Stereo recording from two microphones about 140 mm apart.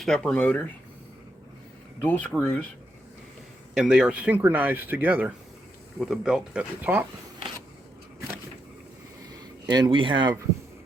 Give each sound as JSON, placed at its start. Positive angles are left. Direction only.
{"t": 0.0, "sound": "speech", "side_deg": 5}
{"t": 2.0, "sound": "speech", "side_deg": 10}
{"t": 3.8, "sound": "speech", "side_deg": -5}
{"t": 9.6, "sound": "speech", "side_deg": -30}